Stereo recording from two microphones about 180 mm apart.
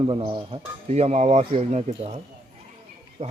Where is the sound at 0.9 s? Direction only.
35° right (ahead or behind).